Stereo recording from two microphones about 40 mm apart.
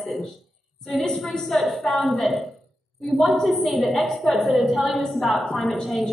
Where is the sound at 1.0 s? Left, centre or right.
Centre.